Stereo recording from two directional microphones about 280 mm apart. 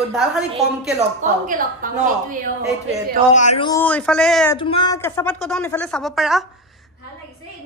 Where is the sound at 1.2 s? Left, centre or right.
Right.